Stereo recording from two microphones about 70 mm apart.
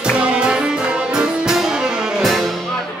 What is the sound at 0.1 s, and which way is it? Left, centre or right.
Music, centre.